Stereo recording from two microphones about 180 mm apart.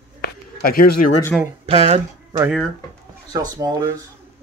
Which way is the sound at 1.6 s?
35° right (ahead or behind).